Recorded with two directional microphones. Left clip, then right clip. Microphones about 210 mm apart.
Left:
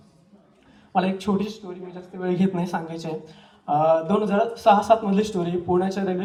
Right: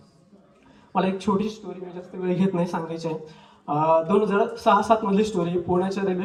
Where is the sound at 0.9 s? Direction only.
20° left (ahead or behind).